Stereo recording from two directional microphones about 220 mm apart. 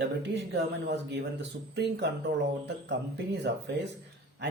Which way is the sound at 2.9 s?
50° right (ahead or behind).